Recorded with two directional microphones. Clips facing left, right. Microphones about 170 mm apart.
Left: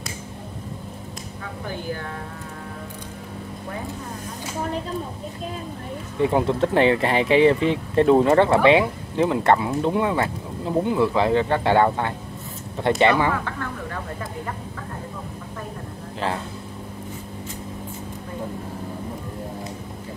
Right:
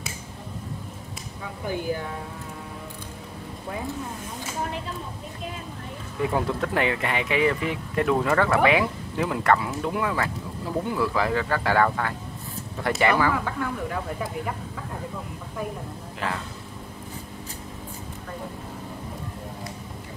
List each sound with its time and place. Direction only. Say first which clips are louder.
6.2 s speech: left 5 dB; 25° left (ahead or behind)
13.3 s speech: even; 10° right (ahead or behind)